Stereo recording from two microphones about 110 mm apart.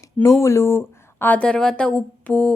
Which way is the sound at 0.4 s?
25° left (ahead or behind).